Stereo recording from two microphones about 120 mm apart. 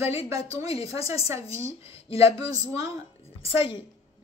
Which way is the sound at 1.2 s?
25° right (ahead or behind).